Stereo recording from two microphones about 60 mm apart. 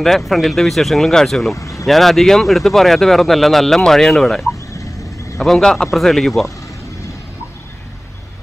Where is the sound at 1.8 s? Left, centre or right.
Centre.